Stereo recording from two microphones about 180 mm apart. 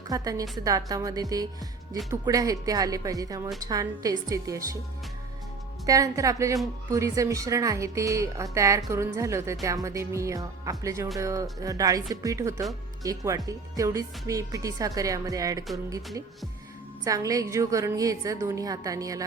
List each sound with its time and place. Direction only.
0.1 s speech: 20° right (ahead or behind)
5.8 s speech: 20° right (ahead or behind)
17.0 s speech: 20° right (ahead or behind)